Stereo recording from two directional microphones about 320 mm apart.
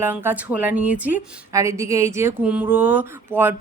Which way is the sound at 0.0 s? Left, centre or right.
Centre.